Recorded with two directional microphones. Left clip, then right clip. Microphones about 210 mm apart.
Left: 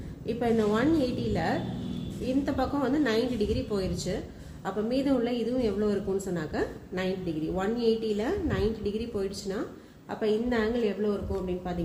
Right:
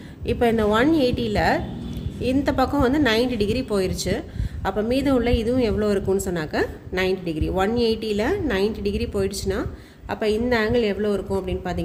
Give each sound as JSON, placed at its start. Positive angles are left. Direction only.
{"t": 0.3, "sound": "a woman's voice", "side_deg": -45}